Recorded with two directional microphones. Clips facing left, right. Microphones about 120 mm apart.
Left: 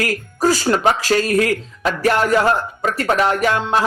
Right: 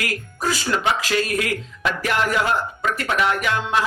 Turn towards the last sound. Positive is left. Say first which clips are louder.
# left 4 dB
turn(degrees=35)  # may be behind; listen again after turning